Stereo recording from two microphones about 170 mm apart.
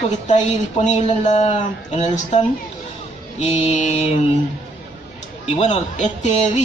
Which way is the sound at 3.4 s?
40° left (ahead or behind).